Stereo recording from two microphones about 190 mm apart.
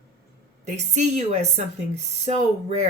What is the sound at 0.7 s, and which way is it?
Speech, 35° right (ahead or behind).